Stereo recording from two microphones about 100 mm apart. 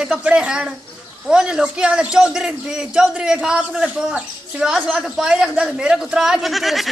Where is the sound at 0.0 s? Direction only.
10° right (ahead or behind).